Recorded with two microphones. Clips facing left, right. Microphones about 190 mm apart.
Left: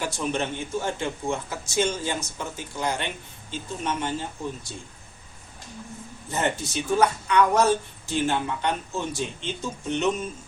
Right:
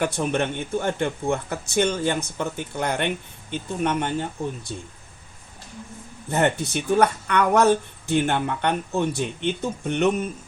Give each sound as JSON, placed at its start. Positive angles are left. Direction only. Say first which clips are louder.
{"t": 0.0, "sound": "speech", "louder": "right 4 dB", "side_deg": -60}
{"t": 6.3, "sound": "speech", "louder": "right 5 dB", "side_deg": -60}